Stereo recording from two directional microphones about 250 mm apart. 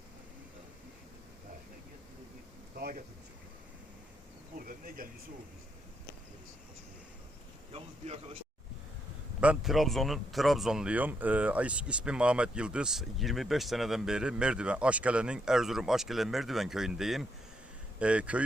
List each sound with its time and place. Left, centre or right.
2.7 s a sound: right
4.5 s insect: right
7.7 s speech: right
9.4 s speech: centre